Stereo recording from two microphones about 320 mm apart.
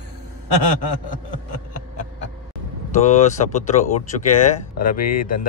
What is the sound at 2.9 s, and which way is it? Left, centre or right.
Speech, left.